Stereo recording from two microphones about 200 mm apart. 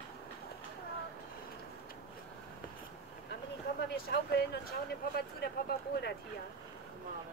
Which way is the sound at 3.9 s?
50° left (ahead or behind).